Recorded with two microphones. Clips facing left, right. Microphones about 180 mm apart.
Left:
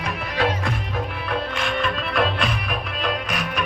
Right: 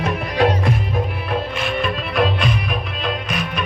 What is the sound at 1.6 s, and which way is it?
Music, 10° right (ahead or behind).